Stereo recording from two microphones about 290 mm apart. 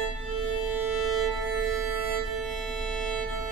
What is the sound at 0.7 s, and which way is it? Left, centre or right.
Music, centre.